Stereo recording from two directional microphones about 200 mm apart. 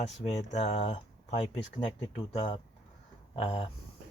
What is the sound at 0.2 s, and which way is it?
Speech, 35° left (ahead or behind).